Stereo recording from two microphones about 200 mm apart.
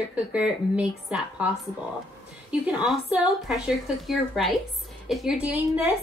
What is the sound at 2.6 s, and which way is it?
A woman's voice, 5° right (ahead or behind).